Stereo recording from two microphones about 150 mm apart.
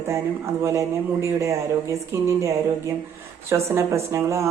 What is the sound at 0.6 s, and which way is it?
Speech, 20° right (ahead or behind).